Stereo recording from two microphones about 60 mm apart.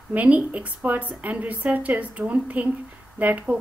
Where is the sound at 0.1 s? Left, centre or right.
Right.